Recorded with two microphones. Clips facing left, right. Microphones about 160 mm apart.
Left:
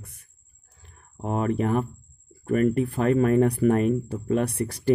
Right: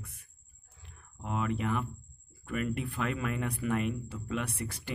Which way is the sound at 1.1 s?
45° left (ahead or behind).